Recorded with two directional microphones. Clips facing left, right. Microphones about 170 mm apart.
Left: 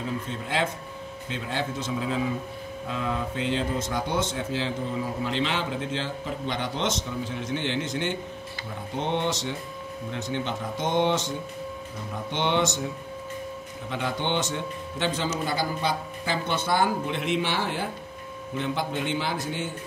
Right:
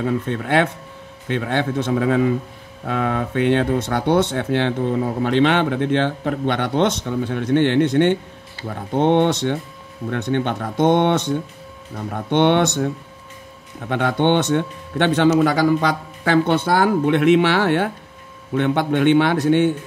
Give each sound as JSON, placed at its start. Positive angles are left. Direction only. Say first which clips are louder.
{"t": 0.0, "sound": "speech", "louder": "right 10 dB", "side_deg": -65}